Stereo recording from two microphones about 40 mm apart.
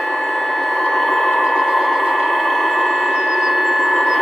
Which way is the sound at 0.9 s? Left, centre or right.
Centre.